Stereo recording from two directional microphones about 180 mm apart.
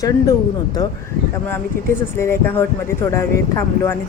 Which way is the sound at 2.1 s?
15° left (ahead or behind).